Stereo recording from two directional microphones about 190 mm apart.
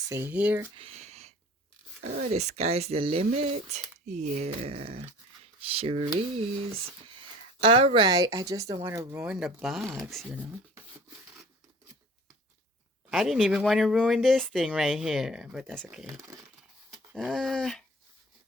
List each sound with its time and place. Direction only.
0.1 s speech: 10° right (ahead or behind)
0.8 s a sound: 35° right (ahead or behind)
2.3 s speech: 35° right (ahead or behind)
7.6 s speech: 30° right (ahead or behind); by 9.8 s centre (ahead or behind)
9.8 s speech: 15° right (ahead or behind)
10.1 s speech: centre (ahead or behind)
13.1 s speech: centre (ahead or behind)
17.2 s speech: centre (ahead or behind)